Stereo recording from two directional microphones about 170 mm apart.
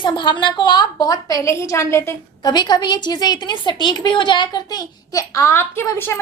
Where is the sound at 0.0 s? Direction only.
25° left (ahead or behind).